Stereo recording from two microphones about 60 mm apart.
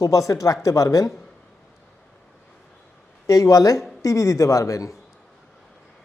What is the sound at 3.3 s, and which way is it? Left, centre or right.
Speech, left.